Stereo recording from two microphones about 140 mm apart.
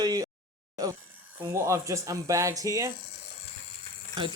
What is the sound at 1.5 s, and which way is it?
Speech, 20° right (ahead or behind).